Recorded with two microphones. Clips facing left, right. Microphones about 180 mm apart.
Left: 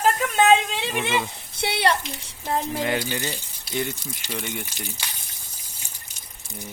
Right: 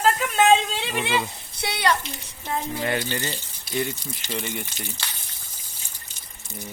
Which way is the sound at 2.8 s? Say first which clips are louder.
Left 1 dB; 10° left (ahead or behind).